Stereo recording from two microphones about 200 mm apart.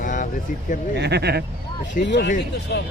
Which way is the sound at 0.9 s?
55° right (ahead or behind).